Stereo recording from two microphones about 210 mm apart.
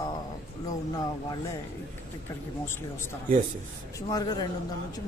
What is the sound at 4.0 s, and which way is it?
Speech, 20° left (ahead or behind).